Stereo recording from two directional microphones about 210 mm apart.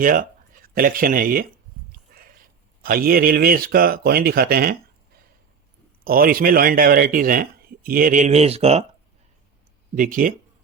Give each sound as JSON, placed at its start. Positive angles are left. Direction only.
{"t": 0.0, "sound": "speech", "side_deg": -40}
{"t": 2.1, "sound": "a sound", "side_deg": -45}
{"t": 2.8, "sound": "speech", "side_deg": -45}
{"t": 6.1, "sound": "speech", "side_deg": -45}
{"t": 9.9, "sound": "speech", "side_deg": -40}